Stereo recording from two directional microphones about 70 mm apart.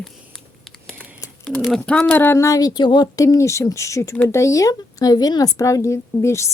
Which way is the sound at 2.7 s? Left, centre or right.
Left.